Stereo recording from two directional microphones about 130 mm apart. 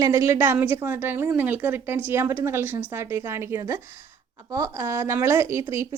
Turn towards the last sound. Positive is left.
turn(degrees=-20)  # may be behind; listen again after turning